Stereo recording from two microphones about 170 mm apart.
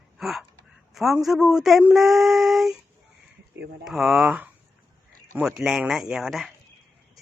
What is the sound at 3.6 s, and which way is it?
Speech, 90° right.